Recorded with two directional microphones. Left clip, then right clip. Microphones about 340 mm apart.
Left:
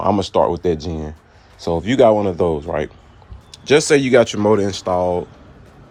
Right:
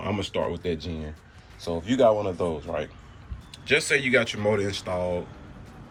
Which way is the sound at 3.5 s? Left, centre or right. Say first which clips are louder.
Left 9 dB; centre.